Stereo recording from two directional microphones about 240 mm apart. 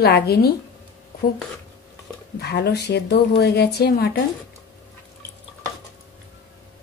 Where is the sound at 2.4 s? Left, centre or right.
Left.